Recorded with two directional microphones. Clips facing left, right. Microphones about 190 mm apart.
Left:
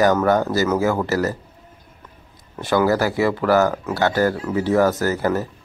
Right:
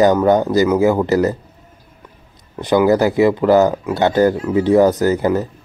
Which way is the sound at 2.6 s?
20° right (ahead or behind).